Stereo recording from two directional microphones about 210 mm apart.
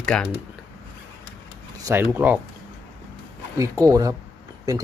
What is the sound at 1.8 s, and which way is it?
Speech, 10° right (ahead or behind).